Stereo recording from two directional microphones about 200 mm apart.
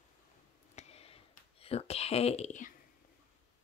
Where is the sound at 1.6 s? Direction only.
30° left (ahead or behind).